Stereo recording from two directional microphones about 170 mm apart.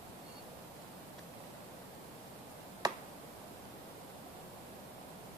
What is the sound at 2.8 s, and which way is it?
Tick-tock, 25° right (ahead or behind).